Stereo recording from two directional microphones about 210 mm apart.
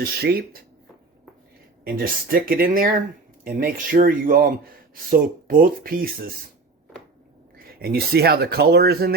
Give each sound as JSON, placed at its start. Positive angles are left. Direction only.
{"t": 0.0, "sound": "speech", "side_deg": -50}
{"t": 1.8, "sound": "speech", "side_deg": -45}
{"t": 7.7, "sound": "speech", "side_deg": -45}